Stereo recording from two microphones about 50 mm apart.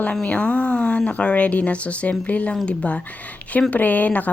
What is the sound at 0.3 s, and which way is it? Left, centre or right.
Speech, left.